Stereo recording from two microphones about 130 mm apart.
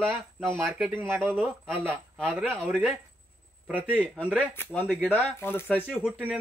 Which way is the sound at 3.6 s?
10° right (ahead or behind).